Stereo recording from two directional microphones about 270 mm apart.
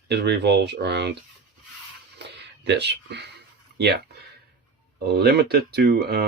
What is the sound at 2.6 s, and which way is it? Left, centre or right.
Speech, right.